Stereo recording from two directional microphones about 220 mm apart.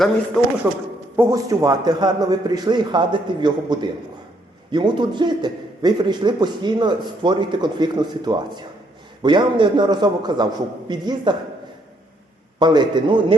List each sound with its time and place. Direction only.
0.7 s a man's voice: 5° right (ahead or behind)
12.5 s a man's voice: 20° right (ahead or behind)